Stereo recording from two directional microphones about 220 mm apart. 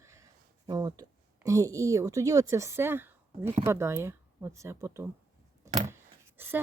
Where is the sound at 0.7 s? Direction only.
20° right (ahead or behind).